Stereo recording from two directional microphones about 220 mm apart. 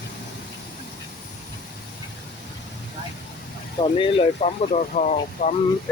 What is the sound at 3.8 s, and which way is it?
Speech, 25° left (ahead or behind).